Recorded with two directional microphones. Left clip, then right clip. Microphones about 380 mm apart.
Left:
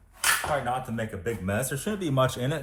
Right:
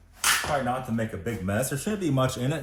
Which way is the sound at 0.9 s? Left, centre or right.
Left.